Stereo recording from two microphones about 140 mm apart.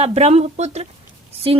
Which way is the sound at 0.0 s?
50° right (ahead or behind).